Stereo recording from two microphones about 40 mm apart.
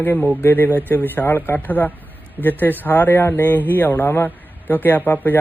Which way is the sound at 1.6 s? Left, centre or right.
Left.